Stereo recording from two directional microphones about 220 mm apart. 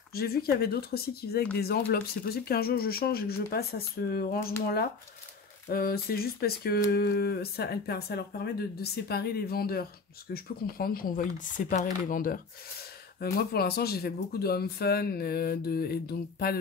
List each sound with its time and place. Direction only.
0.1 s speech: 45° left (ahead or behind)
5.7 s speech: 45° left (ahead or behind)